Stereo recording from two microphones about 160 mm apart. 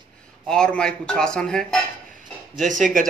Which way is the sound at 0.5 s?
5° left (ahead or behind).